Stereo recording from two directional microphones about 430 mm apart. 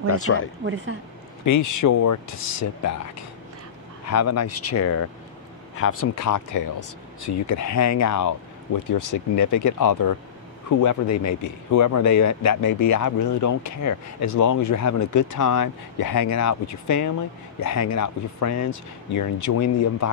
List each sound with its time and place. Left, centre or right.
0.1 s speech: left
1.4 s speech: left